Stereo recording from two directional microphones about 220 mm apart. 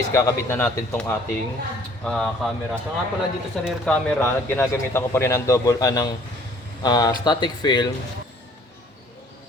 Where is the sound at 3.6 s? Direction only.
5° left (ahead or behind); by 7.8 s 20° left (ahead or behind).